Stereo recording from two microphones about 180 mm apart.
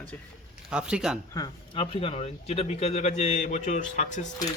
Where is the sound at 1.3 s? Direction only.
25° left (ahead or behind); by 4.2 s 40° left (ahead or behind).